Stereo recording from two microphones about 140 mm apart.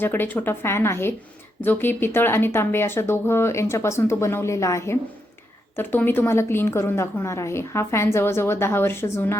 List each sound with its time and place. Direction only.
0.0 s a woman's voice: 15° left (ahead or behind)